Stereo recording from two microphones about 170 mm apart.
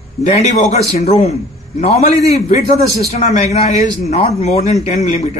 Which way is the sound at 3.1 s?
40° left (ahead or behind).